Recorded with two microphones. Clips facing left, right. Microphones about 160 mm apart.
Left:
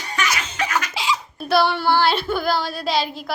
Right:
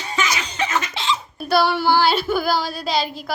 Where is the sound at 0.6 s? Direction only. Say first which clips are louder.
Right 1 dB; 25° right (ahead or behind).